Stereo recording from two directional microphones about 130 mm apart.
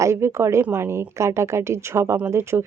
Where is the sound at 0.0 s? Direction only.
20° right (ahead or behind).